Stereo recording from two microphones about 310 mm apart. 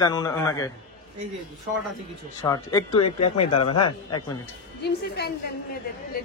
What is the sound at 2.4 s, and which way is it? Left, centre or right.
Speech, centre.